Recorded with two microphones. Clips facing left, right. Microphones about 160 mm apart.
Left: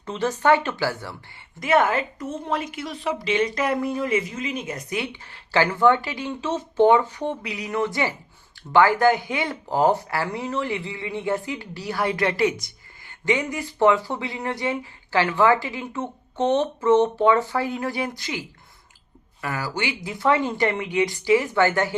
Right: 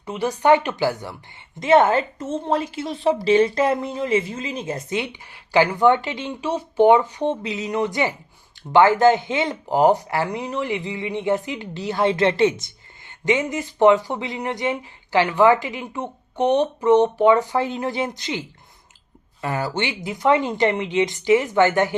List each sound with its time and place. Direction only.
0.0 s speech: 10° right (ahead or behind)